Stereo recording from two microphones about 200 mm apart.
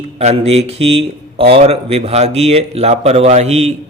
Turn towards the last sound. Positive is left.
turn(degrees=-30)  # may be behind; listen again after turning